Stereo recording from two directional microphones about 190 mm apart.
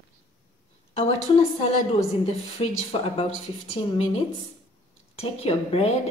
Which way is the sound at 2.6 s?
35° left (ahead or behind).